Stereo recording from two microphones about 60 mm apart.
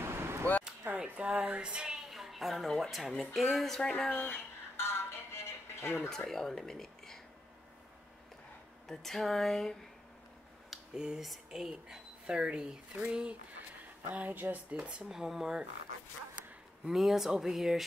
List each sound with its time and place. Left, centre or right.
0.0 s a sound: right
0.8 s a sound: right
1.3 s speech: right; by 4.1 s centre
4.1 s music: left
6.0 s speech: centre
8.8 s speech: centre
11.0 s speech: centre
14.1 s speech: right
14.7 s speech: centre
15.0 s speech: centre
16.8 s speech: centre